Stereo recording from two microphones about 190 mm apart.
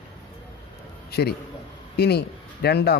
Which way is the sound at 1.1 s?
55° left (ahead or behind).